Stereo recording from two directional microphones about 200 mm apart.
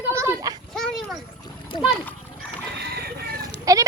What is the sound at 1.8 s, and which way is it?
Speech, centre (ahead or behind).